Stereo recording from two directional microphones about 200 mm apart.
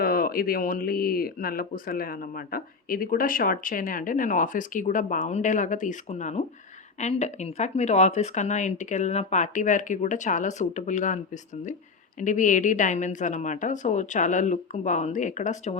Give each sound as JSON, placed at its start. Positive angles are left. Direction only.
{"t": 0.0, "sound": "speech", "side_deg": 45}
{"t": 12.2, "sound": "speech", "side_deg": 40}